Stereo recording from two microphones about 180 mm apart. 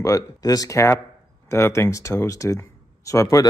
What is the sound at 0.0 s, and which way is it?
A man's voice, 20° left (ahead or behind).